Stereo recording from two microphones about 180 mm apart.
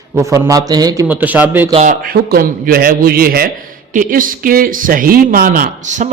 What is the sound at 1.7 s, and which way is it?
Speech, 40° right (ahead or behind).